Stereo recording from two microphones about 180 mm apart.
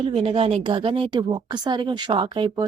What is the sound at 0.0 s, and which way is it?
Speech, 30° right (ahead or behind).